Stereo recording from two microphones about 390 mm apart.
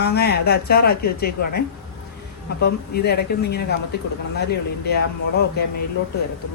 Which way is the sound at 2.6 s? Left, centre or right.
Left.